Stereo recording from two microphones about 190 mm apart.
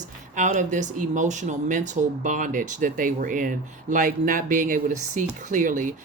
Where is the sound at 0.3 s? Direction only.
40° right (ahead or behind).